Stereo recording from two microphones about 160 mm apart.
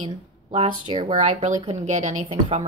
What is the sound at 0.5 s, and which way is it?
A woman's voice, 40° right (ahead or behind).